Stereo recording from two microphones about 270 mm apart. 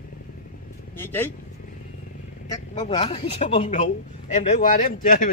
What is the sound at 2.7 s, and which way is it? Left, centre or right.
A man's voice, left.